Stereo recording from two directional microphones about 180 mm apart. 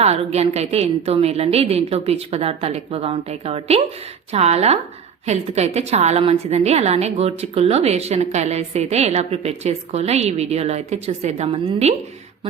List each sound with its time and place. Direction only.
0.0 s a woman's voice: 35° right (ahead or behind)